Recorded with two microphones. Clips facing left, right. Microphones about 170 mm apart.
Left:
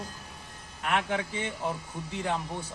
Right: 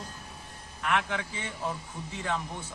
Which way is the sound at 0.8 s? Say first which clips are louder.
Left 1 dB; 45° left (ahead or behind).